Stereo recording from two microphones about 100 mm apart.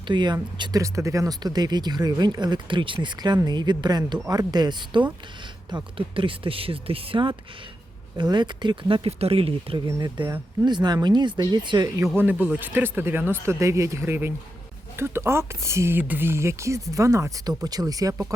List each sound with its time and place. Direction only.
0.1 s speech: 50° right (ahead or behind)
0.8 s speech: 30° right (ahead or behind)
5.7 s speech: 60° right (ahead or behind)
8.2 s speech: 50° right (ahead or behind)
9.0 s speech: 80° right
9.7 s speech: 45° right (ahead or behind)
12.1 s speech: 15° right (ahead or behind)